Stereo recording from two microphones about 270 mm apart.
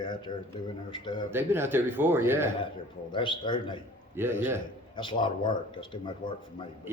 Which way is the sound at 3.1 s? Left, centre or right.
Centre.